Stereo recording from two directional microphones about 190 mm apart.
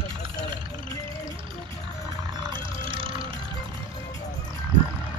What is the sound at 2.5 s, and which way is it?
Vehicle, 25° right (ahead or behind).